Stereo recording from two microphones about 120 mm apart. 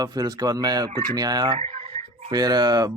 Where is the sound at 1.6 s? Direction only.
55° right (ahead or behind).